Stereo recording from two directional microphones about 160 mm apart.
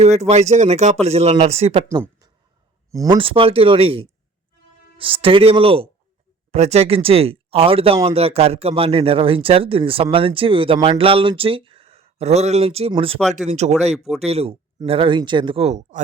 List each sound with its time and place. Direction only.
0.0 s speech: 45° right (ahead or behind)
1.9 s speech: 20° right (ahead or behind)
3.2 s speech: 35° right (ahead or behind)
13.9 s speech: centre (ahead or behind)
14.3 s speech: 40° right (ahead or behind)